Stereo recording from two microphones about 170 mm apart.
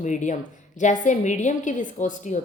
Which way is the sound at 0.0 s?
45° left (ahead or behind).